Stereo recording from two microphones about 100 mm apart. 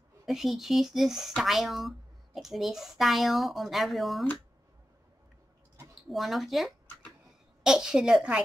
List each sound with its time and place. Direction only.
0.2 s speech: 5° right (ahead or behind)
6.0 s a woman's voice: centre (ahead or behind)